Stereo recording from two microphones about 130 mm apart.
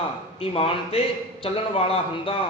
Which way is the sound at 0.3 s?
45° left (ahead or behind).